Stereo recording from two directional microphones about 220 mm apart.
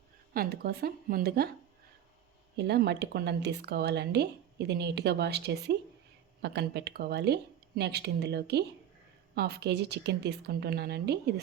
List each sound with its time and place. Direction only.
0.3 s speech: 45° right (ahead or behind)
2.6 s speech: 50° right (ahead or behind)